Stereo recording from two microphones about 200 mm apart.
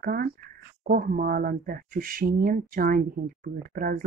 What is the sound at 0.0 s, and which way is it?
Speech, 50° right (ahead or behind).